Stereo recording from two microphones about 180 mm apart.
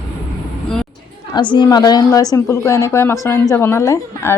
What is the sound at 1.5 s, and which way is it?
A woman's voice, 20° left (ahead or behind).